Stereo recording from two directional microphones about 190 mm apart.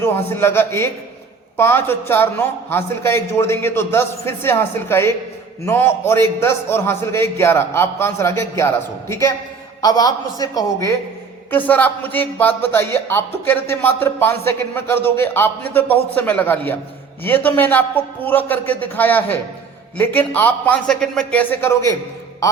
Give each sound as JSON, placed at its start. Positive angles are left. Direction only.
{"t": 0.0, "sound": "a man's voice", "side_deg": 15}